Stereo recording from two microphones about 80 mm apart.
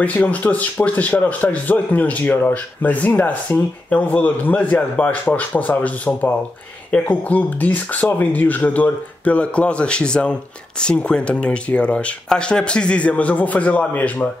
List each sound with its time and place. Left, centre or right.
0.0 s speech: centre